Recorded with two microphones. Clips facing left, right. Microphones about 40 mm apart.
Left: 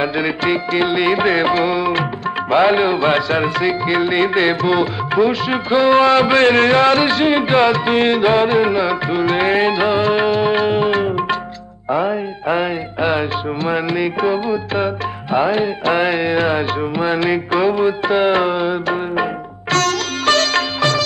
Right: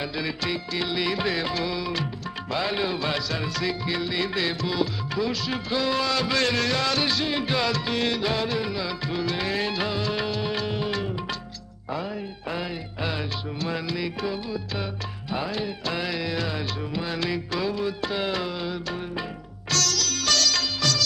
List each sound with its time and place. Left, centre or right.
0.0 s music: left
19.7 s sitar: left